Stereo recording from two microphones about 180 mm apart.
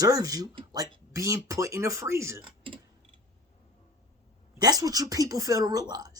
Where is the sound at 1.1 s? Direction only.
15° right (ahead or behind).